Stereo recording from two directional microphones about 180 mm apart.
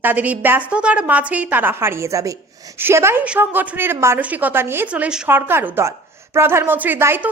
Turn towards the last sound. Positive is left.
turn(degrees=-10)  # may be behind; listen again after turning